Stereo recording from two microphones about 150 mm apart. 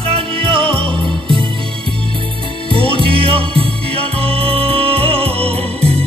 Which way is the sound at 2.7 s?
35° right (ahead or behind).